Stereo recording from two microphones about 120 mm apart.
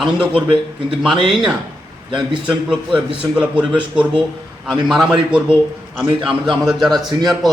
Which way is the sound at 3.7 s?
45° right (ahead or behind).